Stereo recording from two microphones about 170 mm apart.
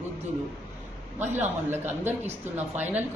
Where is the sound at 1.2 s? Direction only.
10° right (ahead or behind).